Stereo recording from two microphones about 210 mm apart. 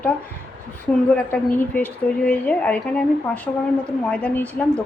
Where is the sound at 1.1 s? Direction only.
10° left (ahead or behind).